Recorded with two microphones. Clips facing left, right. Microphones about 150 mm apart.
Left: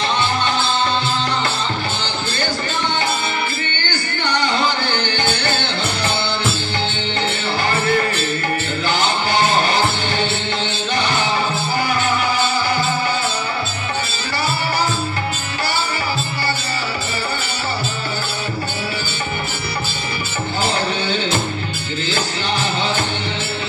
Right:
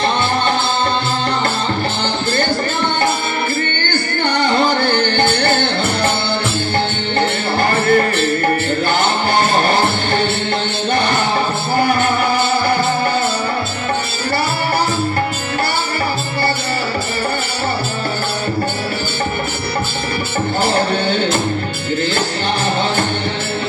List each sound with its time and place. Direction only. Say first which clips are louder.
4.5 s music: right 5 dB; 50° right (ahead or behind)
7.7 s music: right 5 dB; 50° right (ahead or behind)
20.6 s music: right 4 dB; 55° right (ahead or behind)